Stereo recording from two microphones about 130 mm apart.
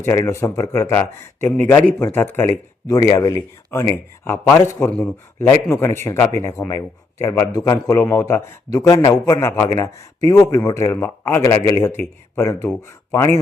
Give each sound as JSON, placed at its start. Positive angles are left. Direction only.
{"t": 0.0, "sound": "a man's voice", "side_deg": 20}
{"t": 2.8, "sound": "a man's voice", "side_deg": 30}